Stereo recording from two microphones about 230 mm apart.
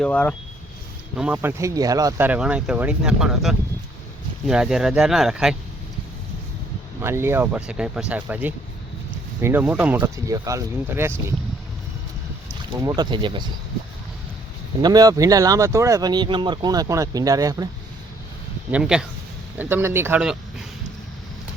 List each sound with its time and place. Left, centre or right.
0.0 s speech: centre
7.0 s speech: centre
12.7 s speech: centre
14.8 s speech: centre
18.7 s speech: centre